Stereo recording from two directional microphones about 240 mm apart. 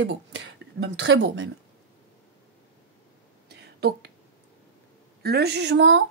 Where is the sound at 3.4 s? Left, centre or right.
Right.